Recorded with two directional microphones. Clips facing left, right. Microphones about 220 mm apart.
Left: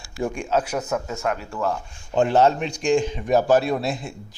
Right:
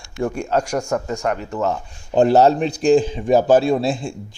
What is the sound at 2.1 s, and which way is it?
A man's voice, 35° right (ahead or behind).